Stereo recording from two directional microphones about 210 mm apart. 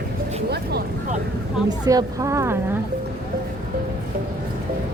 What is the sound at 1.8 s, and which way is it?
Speech, 20° right (ahead or behind).